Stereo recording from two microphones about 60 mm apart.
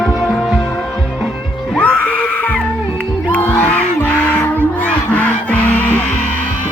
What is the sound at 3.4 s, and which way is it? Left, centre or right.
Music, left.